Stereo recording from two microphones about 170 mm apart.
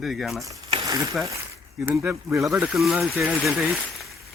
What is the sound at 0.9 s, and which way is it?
Speech, 20° right (ahead or behind).